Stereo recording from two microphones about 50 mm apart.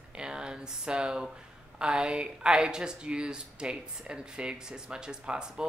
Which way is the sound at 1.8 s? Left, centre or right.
Centre.